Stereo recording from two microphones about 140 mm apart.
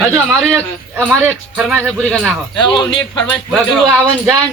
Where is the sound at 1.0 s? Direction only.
10° right (ahead or behind).